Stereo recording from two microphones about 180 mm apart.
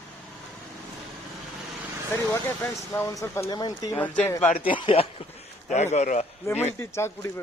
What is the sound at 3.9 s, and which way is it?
Speech, 10° left (ahead or behind).